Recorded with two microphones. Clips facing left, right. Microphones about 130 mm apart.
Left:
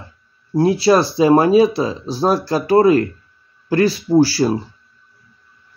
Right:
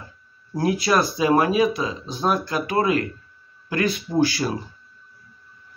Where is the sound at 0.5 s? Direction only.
30° left (ahead or behind).